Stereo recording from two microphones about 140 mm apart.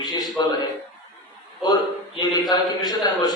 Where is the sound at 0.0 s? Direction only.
30° left (ahead or behind).